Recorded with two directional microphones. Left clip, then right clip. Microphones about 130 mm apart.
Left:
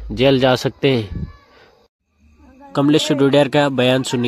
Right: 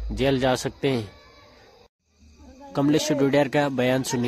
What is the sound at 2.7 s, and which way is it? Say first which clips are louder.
Speech: left 6 dB; 35° left (ahead or behind).